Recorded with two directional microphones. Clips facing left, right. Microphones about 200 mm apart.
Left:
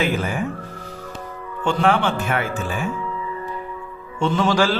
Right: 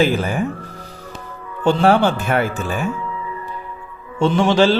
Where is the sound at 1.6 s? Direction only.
35° right (ahead or behind).